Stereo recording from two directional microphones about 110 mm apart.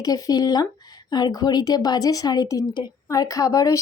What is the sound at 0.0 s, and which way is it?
Speech, 35° left (ahead or behind).